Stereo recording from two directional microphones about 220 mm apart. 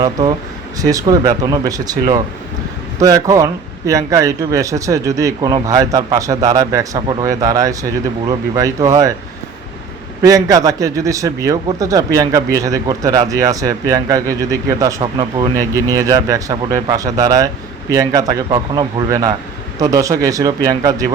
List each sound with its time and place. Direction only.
0.0 s a man's voice: 20° right (ahead or behind)
10.2 s a man's voice: 15° right (ahead or behind)